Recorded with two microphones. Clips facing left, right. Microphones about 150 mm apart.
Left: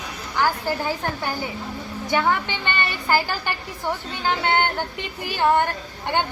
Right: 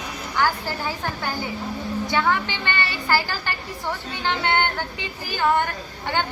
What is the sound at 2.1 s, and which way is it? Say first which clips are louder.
A woman's voice: left 2 dB; 15° left (ahead or behind).